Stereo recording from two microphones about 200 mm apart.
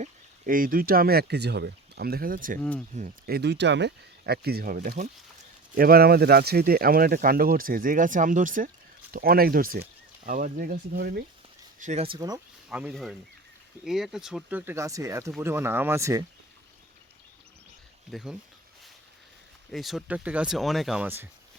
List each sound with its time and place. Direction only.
0.0 s speech: 45° right (ahead or behind)
2.6 s speech: 5° left (ahead or behind)
2.9 s speech: 35° right (ahead or behind)
3.3 s speech: 55° right (ahead or behind)
11.8 s speech: 35° right (ahead or behind)
12.6 s speech: 5° right (ahead or behind)
18.1 s speech: 5° right (ahead or behind)
19.7 s speech: centre (ahead or behind)